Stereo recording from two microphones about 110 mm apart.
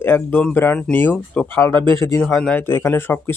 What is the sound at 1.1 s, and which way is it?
Speech, 5° left (ahead or behind).